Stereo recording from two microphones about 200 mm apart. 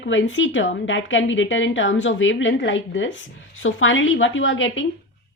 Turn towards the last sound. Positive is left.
turn(degrees=70)  # may be behind; listen again after turning